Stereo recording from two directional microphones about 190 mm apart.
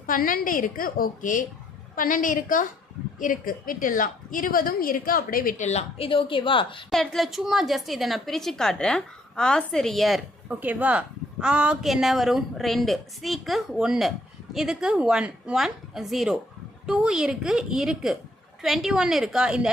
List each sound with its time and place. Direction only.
0.0 s a woman's voice: 45° left (ahead or behind); by 6.8 s 25° left (ahead or behind)
6.9 s a woman's voice: centre (ahead or behind)